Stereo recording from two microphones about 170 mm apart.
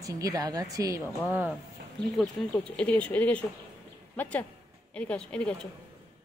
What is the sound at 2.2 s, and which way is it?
Speech, 5° left (ahead or behind).